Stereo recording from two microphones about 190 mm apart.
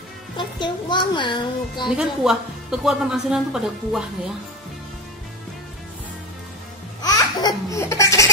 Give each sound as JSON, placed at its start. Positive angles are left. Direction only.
{"t": 0.4, "sound": "speech", "side_deg": 25}
{"t": 1.9, "sound": "a woman's voice", "side_deg": -5}
{"t": 7.0, "sound": "laughter", "side_deg": 20}